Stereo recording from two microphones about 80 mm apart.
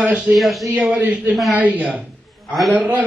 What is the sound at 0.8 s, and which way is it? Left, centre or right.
A man's voice, centre.